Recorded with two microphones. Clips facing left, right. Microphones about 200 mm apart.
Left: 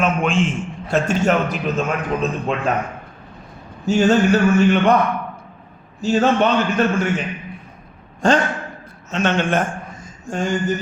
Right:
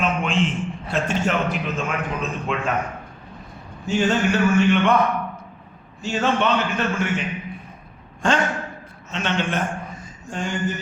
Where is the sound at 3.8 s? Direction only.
40° left (ahead or behind).